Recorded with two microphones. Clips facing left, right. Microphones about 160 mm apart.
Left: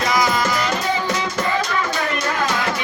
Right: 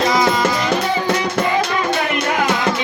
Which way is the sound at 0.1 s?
25° right (ahead or behind).